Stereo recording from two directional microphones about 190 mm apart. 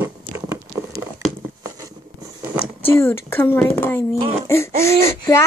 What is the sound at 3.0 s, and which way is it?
Child singing, 10° left (ahead or behind).